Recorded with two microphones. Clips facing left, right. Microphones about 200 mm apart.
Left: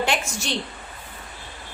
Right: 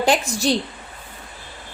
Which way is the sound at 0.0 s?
35° right (ahead or behind).